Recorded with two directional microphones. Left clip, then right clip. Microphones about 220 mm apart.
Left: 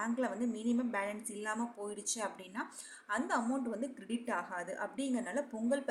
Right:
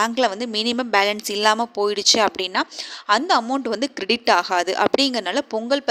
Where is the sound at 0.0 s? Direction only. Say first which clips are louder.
Right 16 dB; 40° right (ahead or behind).